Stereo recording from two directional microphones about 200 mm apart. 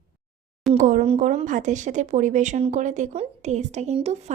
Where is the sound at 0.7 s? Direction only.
40° right (ahead or behind).